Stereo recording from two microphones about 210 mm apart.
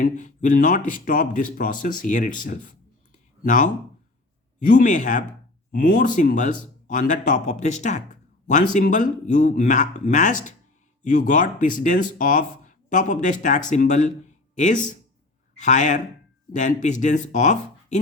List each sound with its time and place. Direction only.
0.0 s speech: 40° left (ahead or behind)